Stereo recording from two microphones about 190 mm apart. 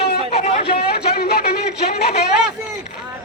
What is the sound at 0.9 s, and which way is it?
Speech, 60° left (ahead or behind).